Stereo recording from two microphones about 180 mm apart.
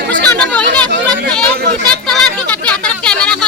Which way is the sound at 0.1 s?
5° left (ahead or behind).